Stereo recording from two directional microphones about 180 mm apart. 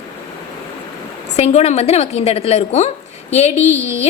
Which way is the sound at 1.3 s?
35° left (ahead or behind).